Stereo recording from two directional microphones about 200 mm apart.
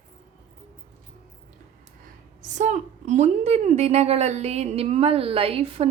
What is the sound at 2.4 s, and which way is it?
A woman's voice, 40° right (ahead or behind).